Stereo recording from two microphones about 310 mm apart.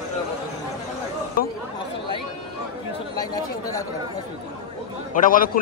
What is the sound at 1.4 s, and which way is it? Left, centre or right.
Speech, left.